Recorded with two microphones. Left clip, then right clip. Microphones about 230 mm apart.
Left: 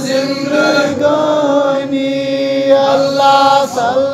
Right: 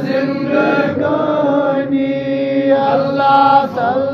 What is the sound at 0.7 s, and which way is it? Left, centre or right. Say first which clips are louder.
Chant: left 3 dB; left.